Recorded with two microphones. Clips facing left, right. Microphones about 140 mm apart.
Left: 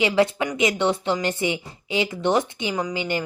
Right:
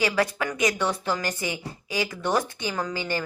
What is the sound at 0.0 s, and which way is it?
A woman's voice, 20° left (ahead or behind).